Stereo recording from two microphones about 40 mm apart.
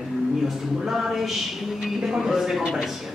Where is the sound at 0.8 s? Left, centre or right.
Centre.